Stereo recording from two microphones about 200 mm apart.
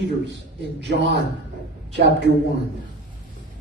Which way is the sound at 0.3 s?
60° right (ahead or behind).